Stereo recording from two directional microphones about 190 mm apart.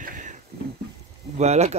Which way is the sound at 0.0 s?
45° right (ahead or behind).